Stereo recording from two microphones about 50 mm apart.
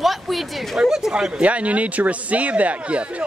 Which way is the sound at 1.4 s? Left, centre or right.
Right.